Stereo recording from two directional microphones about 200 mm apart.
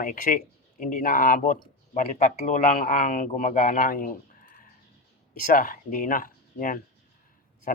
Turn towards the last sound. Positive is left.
turn(degrees=45)  # may be behind; listen again after turning